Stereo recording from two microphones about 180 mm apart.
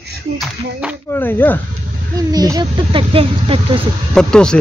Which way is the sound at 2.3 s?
20° right (ahead or behind).